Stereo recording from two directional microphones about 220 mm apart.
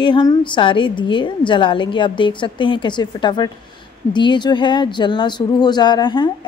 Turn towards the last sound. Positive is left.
turn(degrees=20)  # may be behind; listen again after turning